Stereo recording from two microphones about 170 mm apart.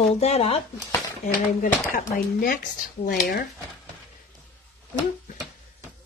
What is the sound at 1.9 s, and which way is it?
Speech, 55° left (ahead or behind).